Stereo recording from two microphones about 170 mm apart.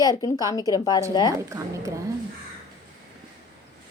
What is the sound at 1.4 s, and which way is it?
Speech, 15° right (ahead or behind).